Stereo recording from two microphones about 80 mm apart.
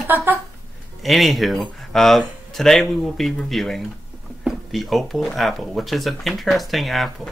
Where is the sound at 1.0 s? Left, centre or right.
Centre.